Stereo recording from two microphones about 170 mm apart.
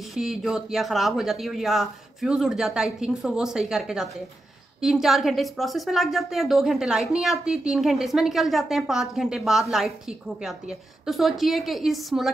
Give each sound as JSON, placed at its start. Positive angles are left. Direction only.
{"t": 0.1, "sound": "a woman's voice", "side_deg": 0}
{"t": 11.1, "sound": "a woman's voice", "side_deg": 0}